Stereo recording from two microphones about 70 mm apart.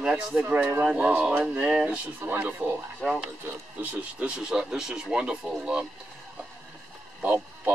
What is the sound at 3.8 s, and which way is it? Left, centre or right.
Speech, right.